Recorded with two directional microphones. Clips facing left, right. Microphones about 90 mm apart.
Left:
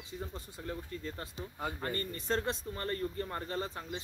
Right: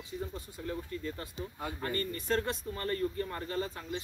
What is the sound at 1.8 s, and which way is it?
Speech, 30° left (ahead or behind).